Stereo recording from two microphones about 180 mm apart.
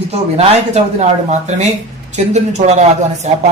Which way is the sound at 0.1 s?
35° right (ahead or behind).